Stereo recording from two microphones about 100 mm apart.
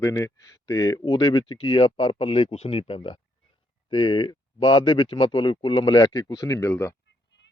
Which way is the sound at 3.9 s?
50° left (ahead or behind).